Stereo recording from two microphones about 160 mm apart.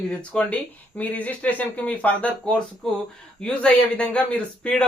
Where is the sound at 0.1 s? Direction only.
10° left (ahead or behind).